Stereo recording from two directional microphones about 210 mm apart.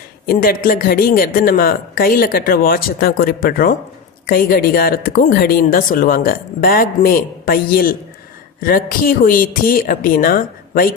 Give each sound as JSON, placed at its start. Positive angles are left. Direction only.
{"t": 0.3, "sound": "speech", "side_deg": 45}